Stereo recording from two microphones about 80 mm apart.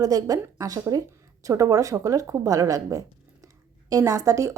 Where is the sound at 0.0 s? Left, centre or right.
Right.